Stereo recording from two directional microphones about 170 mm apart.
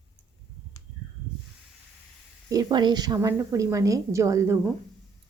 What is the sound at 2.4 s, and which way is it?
A woman's voice, 25° right (ahead or behind).